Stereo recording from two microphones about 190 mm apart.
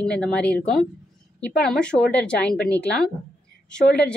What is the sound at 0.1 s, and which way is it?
A woman's voice, 5° left (ahead or behind).